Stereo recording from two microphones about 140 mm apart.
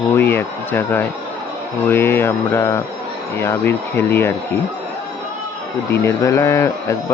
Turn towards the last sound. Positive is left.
turn(degrees=20)  # may be behind; listen again after turning